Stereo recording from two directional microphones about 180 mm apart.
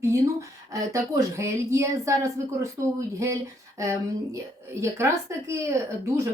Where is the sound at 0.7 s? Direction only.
15° right (ahead or behind).